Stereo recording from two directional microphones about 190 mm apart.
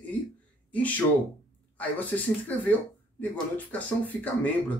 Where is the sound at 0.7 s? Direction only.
10° left (ahead or behind).